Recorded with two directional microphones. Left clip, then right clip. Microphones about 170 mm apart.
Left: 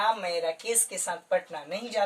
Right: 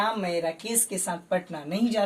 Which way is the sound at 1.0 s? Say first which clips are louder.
Left 2 dB; 10° left (ahead or behind).